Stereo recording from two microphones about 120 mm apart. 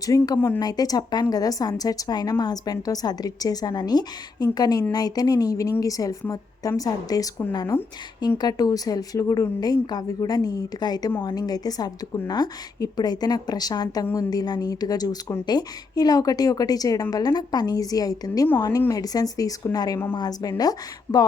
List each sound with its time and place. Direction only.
0.0 s a woman's voice: 30° left (ahead or behind)
0.3 s speech: 15° left (ahead or behind)
0.6 s a woman's voice: 30° left (ahead or behind)